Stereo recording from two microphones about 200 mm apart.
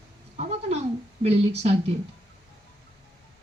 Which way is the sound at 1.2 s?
30° right (ahead or behind).